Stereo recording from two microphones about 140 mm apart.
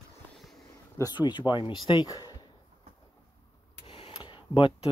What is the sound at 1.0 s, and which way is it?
Speech, 30° left (ahead or behind).